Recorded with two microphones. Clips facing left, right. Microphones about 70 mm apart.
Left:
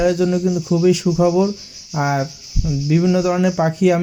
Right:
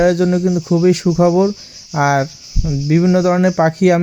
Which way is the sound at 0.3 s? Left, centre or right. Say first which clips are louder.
Right 3 dB; right.